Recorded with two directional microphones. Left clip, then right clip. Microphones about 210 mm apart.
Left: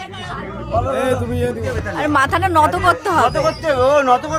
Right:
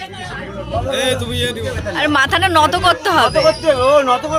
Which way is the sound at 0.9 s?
40° left (ahead or behind).